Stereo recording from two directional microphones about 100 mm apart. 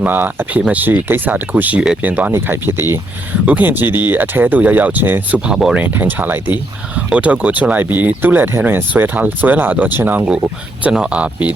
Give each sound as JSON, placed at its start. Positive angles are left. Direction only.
{"t": 0.0, "sound": "speech", "side_deg": -20}
{"t": 5.5, "sound": "speech", "side_deg": -5}
{"t": 5.8, "sound": "speech", "side_deg": -20}